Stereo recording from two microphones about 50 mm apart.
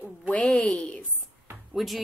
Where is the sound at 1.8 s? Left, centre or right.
Centre.